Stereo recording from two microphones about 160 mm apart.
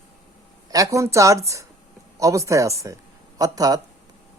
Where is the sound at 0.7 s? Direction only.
20° right (ahead or behind).